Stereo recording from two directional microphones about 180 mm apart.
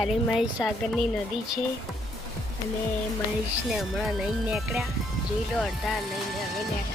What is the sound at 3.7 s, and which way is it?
A woman's voice, centre (ahead or behind).